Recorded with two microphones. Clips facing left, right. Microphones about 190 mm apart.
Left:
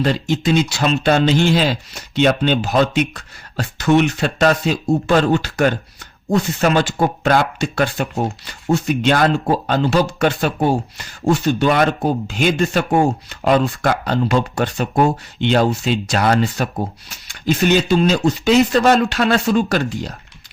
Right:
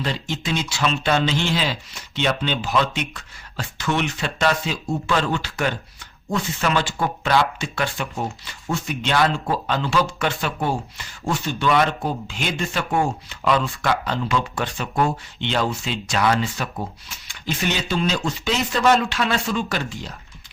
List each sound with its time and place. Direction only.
0.6 s speech: 40° left (ahead or behind)
17.7 s speech: 55° left (ahead or behind)
17.9 s speech: 40° left (ahead or behind)